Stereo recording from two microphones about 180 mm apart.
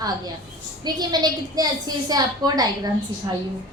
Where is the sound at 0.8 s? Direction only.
20° right (ahead or behind).